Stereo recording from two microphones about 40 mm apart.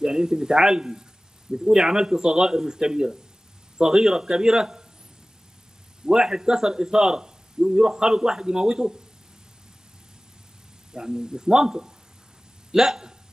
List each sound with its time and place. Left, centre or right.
0.0 s a man's voice: centre
6.0 s a man's voice: centre
10.9 s a man's voice: centre